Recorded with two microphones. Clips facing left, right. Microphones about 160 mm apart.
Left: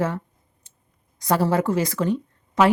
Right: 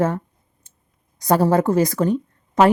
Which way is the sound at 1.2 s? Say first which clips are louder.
Right 4 dB; 40° right (ahead or behind).